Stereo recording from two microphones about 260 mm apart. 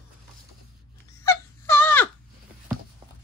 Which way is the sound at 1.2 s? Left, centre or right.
Centre.